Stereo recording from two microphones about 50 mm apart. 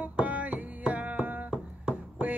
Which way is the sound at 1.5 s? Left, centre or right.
Centre.